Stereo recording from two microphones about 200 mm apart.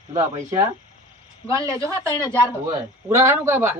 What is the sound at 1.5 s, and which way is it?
Speech, 15° right (ahead or behind).